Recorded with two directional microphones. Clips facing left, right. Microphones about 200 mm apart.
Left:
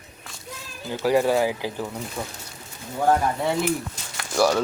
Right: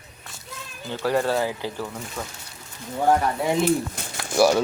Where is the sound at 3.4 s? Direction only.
20° right (ahead or behind).